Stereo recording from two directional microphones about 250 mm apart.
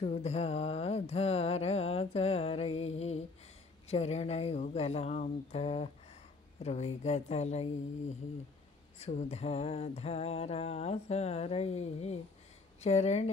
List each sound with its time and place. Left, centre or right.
0.0 s music: left
9.0 s music: left